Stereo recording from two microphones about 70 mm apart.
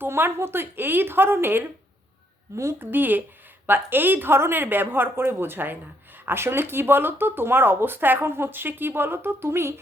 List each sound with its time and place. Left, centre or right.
0.0 s speech: right